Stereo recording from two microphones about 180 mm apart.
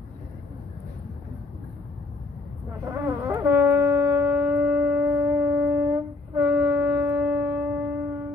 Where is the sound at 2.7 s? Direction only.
15° right (ahead or behind).